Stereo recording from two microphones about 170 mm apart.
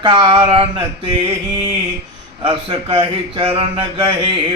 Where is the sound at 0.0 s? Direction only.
30° right (ahead or behind).